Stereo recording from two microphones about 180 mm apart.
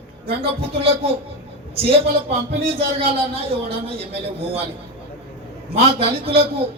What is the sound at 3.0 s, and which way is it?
A man's voice, 35° right (ahead or behind).